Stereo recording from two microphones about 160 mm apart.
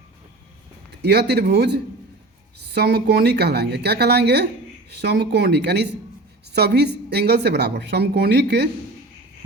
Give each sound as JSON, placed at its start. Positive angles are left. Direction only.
{"t": 0.9, "sound": "a man's voice", "side_deg": -90}